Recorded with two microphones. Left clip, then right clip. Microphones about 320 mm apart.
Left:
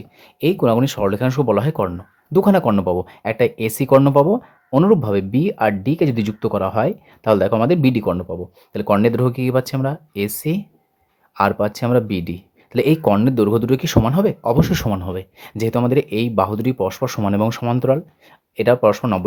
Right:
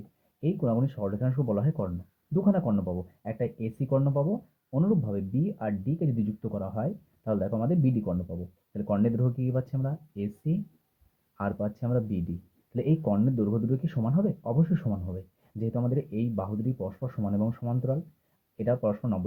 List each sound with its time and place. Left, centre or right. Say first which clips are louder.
0.4 s speech: left 14 dB; left